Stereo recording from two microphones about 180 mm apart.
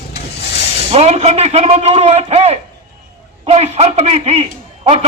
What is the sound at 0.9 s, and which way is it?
A man's voice, 35° right (ahead or behind).